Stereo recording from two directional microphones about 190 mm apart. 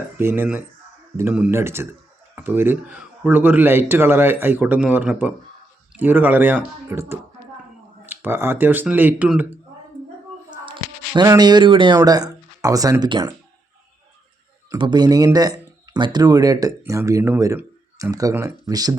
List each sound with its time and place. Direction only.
0.2 s speech: 10° right (ahead or behind)
10.7 s speech: 20° right (ahead or behind)
14.7 s speech: 20° right (ahead or behind)